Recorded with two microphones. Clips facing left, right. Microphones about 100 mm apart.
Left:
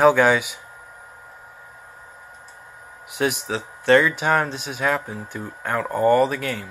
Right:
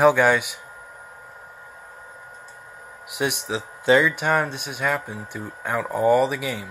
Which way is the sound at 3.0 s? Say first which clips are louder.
Left 2 dB; 5° right (ahead or behind).